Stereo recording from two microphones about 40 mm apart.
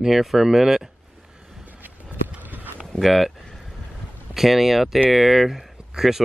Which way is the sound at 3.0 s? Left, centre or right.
Centre.